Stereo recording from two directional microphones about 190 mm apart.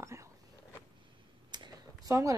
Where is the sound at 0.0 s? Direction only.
15° right (ahead or behind).